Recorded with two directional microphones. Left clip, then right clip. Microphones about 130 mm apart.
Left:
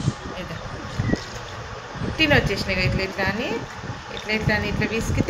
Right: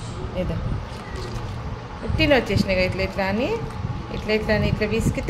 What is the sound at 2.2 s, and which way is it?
Speech, 90° right.